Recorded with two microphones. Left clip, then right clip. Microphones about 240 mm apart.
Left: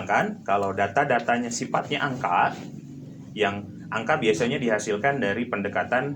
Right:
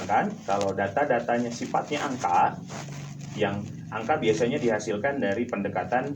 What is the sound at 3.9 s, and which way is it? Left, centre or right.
A man's voice, left.